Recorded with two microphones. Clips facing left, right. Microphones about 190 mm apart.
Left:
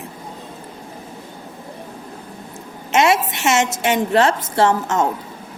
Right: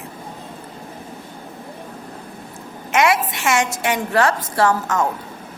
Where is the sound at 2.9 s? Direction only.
25° left (ahead or behind).